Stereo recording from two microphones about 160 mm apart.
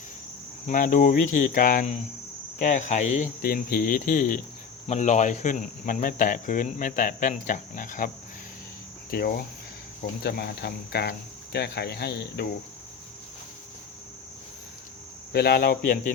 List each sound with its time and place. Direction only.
0.7 s speech: 55° left (ahead or behind)
4.9 s speech: 45° left (ahead or behind)
9.0 s speech: 70° left (ahead or behind); by 11.1 s 90° left
11.5 s cricket: 90° left
15.3 s speech: 80° left; by 16.1 s 65° left (ahead or behind)